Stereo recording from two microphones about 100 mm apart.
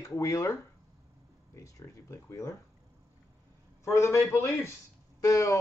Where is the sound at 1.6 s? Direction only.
30° left (ahead or behind).